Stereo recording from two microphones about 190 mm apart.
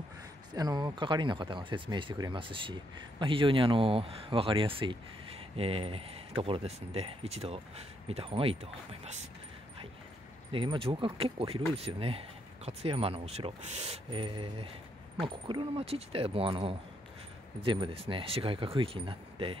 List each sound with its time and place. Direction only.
0.6 s speech: 20° right (ahead or behind)
10.5 s speech: 25° right (ahead or behind)